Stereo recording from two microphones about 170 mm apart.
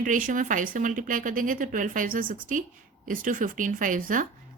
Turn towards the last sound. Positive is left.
turn(degrees=-50)  # may be behind; listen again after turning